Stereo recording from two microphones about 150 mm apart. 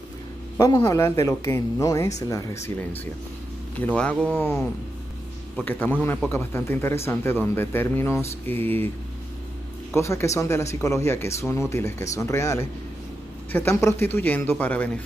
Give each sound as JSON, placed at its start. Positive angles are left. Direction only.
{"t": 0.6, "sound": "speech", "side_deg": 20}
{"t": 3.8, "sound": "speech", "side_deg": 10}
{"t": 5.7, "sound": "speech", "side_deg": 10}
{"t": 9.9, "sound": "speech", "side_deg": 20}